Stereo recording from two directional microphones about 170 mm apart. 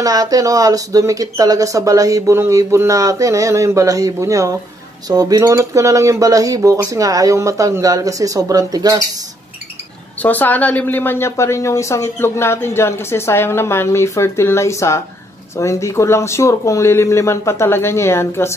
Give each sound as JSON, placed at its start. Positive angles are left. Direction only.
{"t": 0.0, "sound": "speech", "side_deg": -20}
{"t": 10.2, "sound": "speech", "side_deg": 10}